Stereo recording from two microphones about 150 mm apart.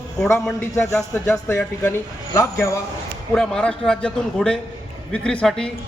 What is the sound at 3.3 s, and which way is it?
A man's voice, 5° left (ahead or behind).